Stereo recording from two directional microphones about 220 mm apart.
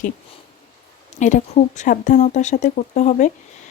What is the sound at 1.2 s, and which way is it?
A woman's voice, 35° left (ahead or behind).